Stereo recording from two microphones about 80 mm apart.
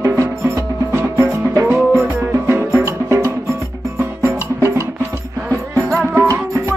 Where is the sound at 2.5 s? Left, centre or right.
Right.